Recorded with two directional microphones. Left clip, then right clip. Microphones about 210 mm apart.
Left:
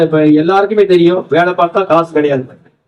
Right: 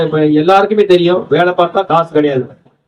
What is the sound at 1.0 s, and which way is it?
Speech, 40° right (ahead or behind).